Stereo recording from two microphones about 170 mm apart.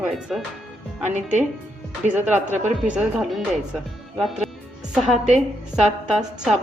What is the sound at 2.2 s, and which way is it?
A woman's voice, 10° right (ahead or behind).